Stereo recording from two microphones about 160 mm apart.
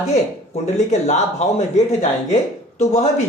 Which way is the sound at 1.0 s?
45° left (ahead or behind).